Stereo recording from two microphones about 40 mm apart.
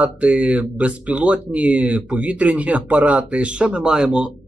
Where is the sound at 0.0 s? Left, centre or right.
Right.